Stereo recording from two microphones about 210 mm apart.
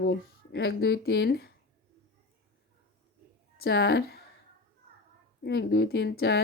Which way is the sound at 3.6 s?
50° left (ahead or behind).